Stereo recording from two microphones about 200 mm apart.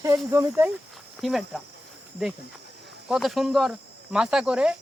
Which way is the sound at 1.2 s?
Centre (ahead or behind).